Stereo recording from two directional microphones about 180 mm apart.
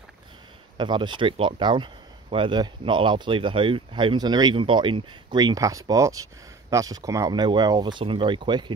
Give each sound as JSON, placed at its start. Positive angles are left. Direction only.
{"t": 0.7, "sound": "speech", "side_deg": -25}